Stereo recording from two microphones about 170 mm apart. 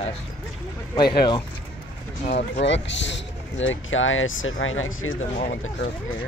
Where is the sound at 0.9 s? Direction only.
25° left (ahead or behind).